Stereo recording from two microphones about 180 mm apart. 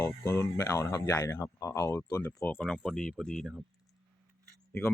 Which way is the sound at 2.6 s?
Centre (ahead or behind).